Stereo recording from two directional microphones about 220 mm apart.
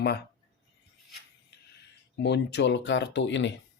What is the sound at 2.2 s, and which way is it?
Speech, 50° left (ahead or behind).